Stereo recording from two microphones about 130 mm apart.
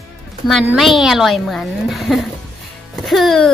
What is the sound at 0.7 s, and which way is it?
A woman's voice, centre (ahead or behind).